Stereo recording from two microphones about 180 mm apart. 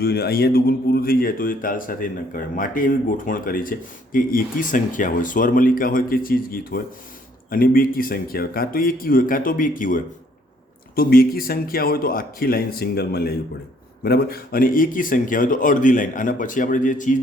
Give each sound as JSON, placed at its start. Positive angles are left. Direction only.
{"t": 0.0, "sound": "speech", "side_deg": 60}